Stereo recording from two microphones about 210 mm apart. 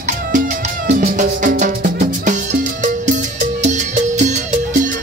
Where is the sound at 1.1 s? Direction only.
40° right (ahead or behind).